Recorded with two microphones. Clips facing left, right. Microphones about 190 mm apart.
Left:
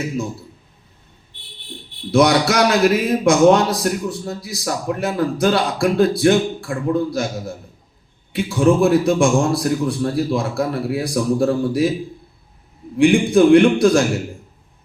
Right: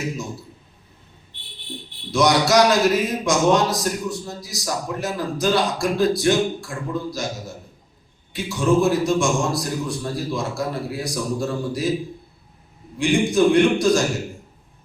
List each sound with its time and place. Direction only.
2.1 s a man's voice: 60° left (ahead or behind)
13.3 s a man's voice: 60° left (ahead or behind)